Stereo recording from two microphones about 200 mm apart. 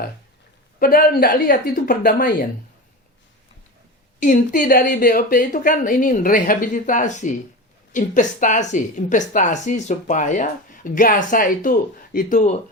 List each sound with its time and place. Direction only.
0.8 s speech: 50° left (ahead or behind)
4.2 s a woman's voice: 40° left (ahead or behind)